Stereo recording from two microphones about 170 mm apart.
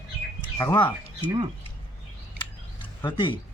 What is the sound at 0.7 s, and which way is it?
Speech, 30° left (ahead or behind).